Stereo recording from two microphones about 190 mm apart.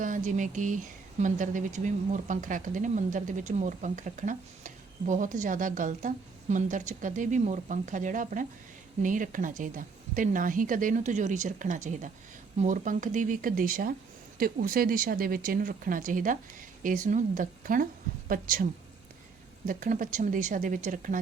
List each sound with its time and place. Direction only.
0.0 s speech: 40° right (ahead or behind)